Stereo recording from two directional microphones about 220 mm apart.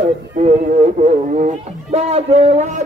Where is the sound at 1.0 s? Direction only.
30° right (ahead or behind).